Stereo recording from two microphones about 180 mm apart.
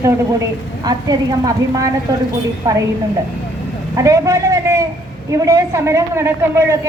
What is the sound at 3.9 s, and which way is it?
A man's voice, 15° right (ahead or behind).